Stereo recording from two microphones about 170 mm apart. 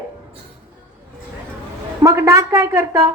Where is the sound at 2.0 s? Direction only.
20° right (ahead or behind).